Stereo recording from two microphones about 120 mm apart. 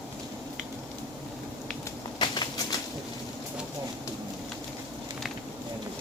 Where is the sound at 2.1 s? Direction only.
40° left (ahead or behind).